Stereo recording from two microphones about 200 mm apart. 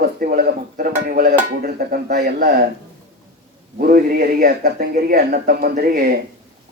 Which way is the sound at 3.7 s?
45° right (ahead or behind).